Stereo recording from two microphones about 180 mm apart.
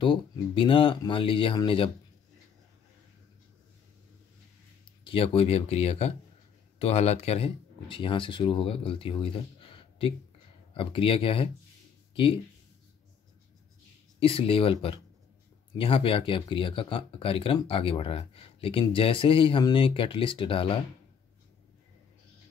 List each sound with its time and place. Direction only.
0.0 s speech: 30° left (ahead or behind)
5.0 s speech: 30° left (ahead or behind)
14.2 s speech: 30° left (ahead or behind)